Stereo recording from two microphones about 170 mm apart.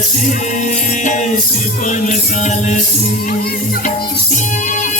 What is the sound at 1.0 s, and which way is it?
Music, 45° left (ahead or behind).